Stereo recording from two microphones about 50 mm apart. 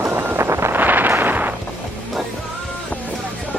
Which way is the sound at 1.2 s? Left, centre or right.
Right.